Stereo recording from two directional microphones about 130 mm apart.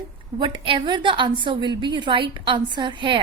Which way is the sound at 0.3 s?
35° right (ahead or behind).